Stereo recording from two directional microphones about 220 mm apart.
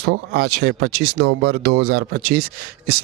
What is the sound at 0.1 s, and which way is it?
Speech, 50° right (ahead or behind).